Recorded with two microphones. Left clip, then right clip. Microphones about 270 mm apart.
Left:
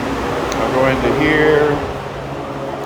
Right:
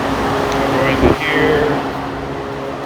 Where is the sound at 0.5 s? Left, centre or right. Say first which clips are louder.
Left 3 dB; centre.